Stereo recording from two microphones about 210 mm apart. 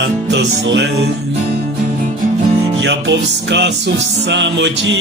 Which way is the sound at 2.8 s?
55° right (ahead or behind).